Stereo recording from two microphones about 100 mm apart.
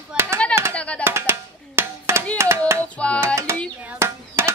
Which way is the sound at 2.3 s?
30° right (ahead or behind).